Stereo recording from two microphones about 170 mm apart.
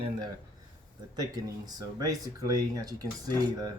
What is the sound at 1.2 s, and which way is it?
Speech, 20° right (ahead or behind).